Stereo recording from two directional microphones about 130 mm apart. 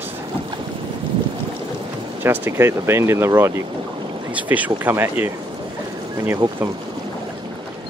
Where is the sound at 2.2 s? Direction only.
15° right (ahead or behind).